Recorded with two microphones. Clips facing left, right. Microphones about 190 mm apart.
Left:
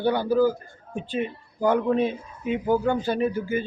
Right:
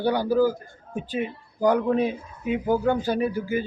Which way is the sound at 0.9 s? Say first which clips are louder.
Even; centre (ahead or behind).